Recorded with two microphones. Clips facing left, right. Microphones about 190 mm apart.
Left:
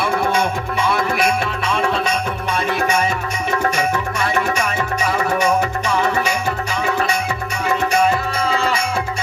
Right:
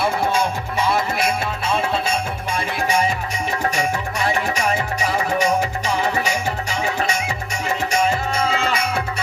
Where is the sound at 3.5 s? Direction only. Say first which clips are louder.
Left 4 dB; 40° right (ahead or behind).